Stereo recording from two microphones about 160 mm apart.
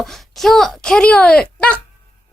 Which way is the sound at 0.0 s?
Centre (ahead or behind).